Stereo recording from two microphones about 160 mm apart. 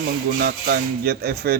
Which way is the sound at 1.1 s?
85° right.